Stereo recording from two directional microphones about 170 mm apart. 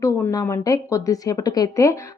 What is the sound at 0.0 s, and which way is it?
Speech, 20° left (ahead or behind).